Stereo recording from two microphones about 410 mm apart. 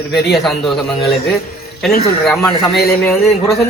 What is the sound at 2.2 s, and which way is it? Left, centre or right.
Speech, centre.